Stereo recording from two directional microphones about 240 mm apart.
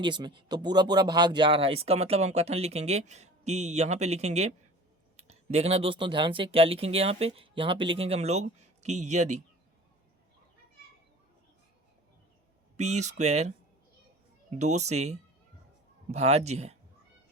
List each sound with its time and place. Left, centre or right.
0.0 s speech: centre
12.7 s speech: right
14.5 s speech: right